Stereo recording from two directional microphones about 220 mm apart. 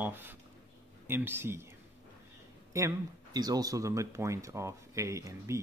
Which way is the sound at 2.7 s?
15° right (ahead or behind).